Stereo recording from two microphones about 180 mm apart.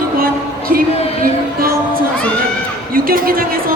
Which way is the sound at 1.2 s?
55° right (ahead or behind).